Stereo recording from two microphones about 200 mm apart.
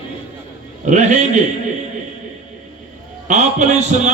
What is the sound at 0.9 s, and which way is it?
Speech, 35° right (ahead or behind).